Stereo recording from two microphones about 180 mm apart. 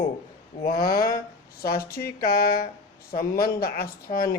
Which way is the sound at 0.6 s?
55° left (ahead or behind).